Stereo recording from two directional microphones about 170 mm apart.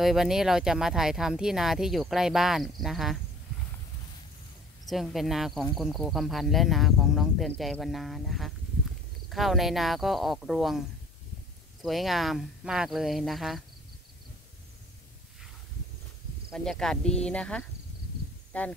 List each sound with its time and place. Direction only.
0.0 s speech: centre (ahead or behind)
4.8 s speech: centre (ahead or behind)
16.4 s speech: 5° left (ahead or behind)